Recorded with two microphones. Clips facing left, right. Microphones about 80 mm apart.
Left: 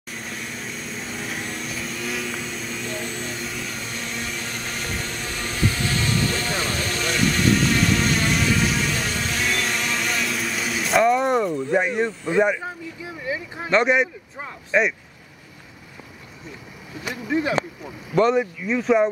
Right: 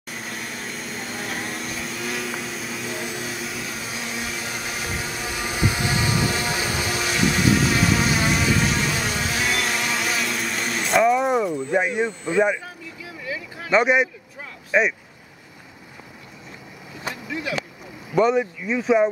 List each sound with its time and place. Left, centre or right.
0.1 s vacuum cleaner: centre
12.6 s vehicle: left
13.7 s speech: centre
17.1 s speech: left
18.1 s speech: centre